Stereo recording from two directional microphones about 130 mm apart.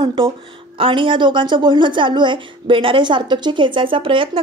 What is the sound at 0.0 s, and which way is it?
Speech, 40° right (ahead or behind).